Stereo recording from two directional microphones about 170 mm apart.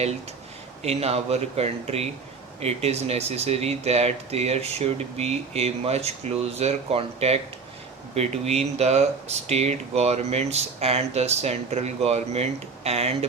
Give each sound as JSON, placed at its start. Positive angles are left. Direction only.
{"t": 0.8, "sound": "speech", "side_deg": -35}